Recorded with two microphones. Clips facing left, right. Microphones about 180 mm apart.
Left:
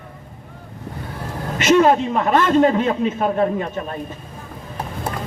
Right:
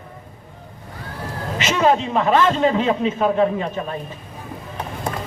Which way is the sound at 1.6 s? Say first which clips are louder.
Left 4 dB; 50° left (ahead or behind).